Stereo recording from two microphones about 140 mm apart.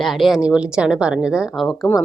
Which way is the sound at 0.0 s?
Centre (ahead or behind).